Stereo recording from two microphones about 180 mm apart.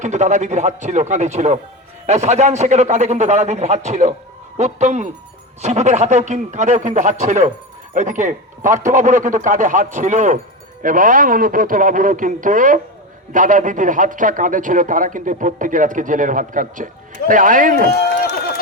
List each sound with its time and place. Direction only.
0.0 s a man's voice: 40° right (ahead or behind)
17.9 s run: 65° left (ahead or behind)